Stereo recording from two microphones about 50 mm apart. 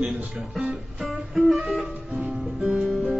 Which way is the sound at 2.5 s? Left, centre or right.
Right.